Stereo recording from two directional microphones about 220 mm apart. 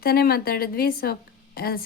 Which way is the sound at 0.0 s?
45° left (ahead or behind).